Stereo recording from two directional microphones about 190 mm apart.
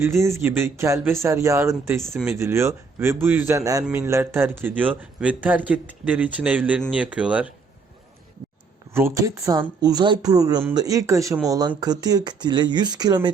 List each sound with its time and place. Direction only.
0.0 s speech: 15° right (ahead or behind)
8.9 s speech: 15° right (ahead or behind)